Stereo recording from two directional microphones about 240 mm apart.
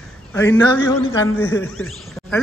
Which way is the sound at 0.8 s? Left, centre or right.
Centre.